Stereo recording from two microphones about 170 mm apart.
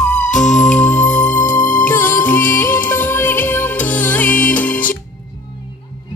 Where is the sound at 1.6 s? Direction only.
50° left (ahead or behind).